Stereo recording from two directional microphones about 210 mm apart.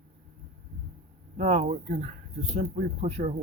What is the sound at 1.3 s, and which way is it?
Speech, 35° right (ahead or behind).